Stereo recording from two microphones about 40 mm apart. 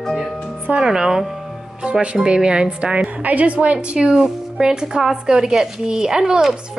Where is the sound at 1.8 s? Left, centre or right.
Right.